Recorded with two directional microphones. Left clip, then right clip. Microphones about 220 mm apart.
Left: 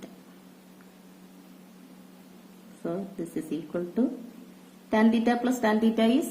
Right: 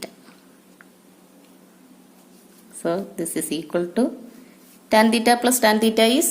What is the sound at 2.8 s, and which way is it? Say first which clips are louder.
A woman's voice: right 9 dB; 55° right (ahead or behind).